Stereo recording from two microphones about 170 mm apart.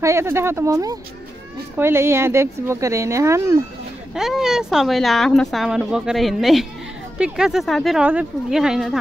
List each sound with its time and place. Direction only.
0.0 s speech: 15° right (ahead or behind)
4.1 s speech: 5° right (ahead or behind)